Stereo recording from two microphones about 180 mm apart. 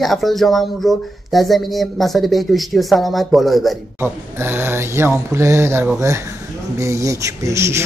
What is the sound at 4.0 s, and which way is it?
Speech, 10° right (ahead or behind).